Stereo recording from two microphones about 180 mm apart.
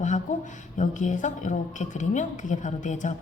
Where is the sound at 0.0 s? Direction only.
45° left (ahead or behind).